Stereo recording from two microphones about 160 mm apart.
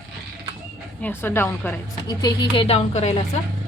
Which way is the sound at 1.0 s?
15° left (ahead or behind).